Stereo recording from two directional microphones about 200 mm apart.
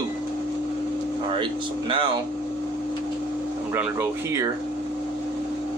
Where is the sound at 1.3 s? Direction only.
25° right (ahead or behind).